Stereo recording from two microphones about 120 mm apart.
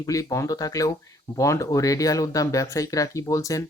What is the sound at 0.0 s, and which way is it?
Speech, 30° left (ahead or behind).